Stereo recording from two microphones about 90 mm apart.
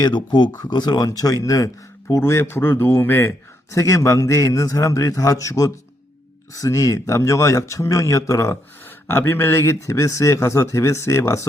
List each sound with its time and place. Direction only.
0.0 s speech: 55° left (ahead or behind); by 2.2 s 40° left (ahead or behind)
2.2 s a man's voice: 30° left (ahead or behind)